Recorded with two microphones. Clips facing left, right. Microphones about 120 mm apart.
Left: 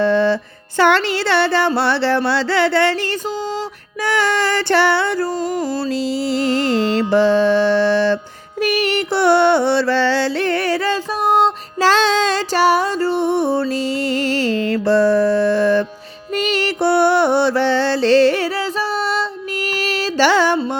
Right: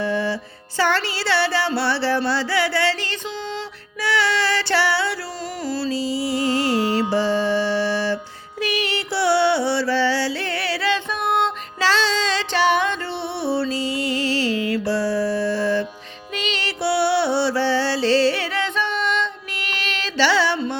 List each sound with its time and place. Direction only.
0.0 s music: 65° left (ahead or behind)
4.0 s music: 50° left (ahead or behind); by 8.2 s 65° left (ahead or behind)
8.6 s music: 50° left (ahead or behind)
11.8 s music: 50° left (ahead or behind)